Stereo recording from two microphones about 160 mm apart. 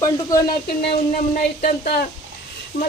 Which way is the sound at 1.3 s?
60° left (ahead or behind).